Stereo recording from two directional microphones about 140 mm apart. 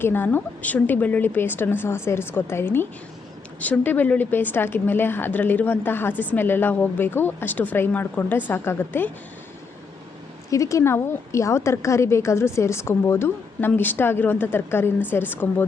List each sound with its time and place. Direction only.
0.0 s speech: 15° left (ahead or behind)
10.5 s a woman's voice: 25° left (ahead or behind)